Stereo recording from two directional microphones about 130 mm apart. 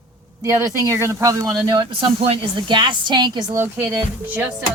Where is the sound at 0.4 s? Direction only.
25° right (ahead or behind).